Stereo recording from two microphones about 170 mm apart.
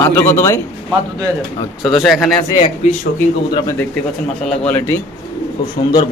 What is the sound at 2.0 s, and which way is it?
Speech, centre (ahead or behind).